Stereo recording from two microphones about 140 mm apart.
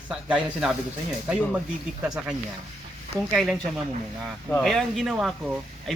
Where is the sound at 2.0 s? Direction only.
5° right (ahead or behind).